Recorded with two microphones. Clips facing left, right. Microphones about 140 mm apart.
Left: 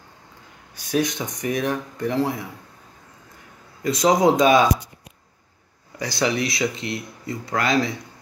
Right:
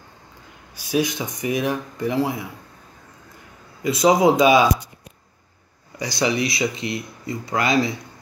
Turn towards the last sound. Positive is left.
turn(degrees=-5)  # may be behind; listen again after turning